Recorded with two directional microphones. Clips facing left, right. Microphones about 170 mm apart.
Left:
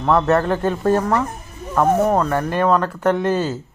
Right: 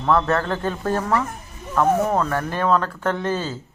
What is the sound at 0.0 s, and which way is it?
Speech, 15° left (ahead or behind).